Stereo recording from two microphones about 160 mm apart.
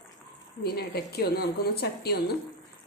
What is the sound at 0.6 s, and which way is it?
A woman's voice, 80° left.